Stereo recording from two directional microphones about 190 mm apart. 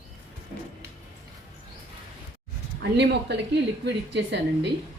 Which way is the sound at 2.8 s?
65° right (ahead or behind).